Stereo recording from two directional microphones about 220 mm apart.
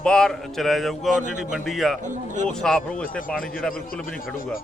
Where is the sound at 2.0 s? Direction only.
35° right (ahead or behind).